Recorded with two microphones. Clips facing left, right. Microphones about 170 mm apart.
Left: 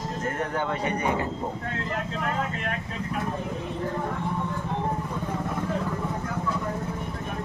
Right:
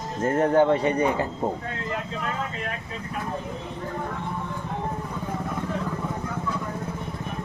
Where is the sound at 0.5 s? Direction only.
30° right (ahead or behind).